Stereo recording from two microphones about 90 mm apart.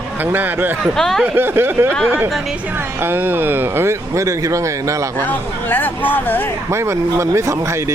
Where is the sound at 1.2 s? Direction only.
25° right (ahead or behind).